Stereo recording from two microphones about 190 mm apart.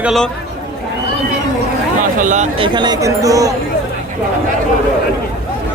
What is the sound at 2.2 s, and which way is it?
Speech, 40° right (ahead or behind).